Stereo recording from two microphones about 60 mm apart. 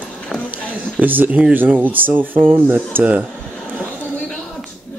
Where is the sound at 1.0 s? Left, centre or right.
Right.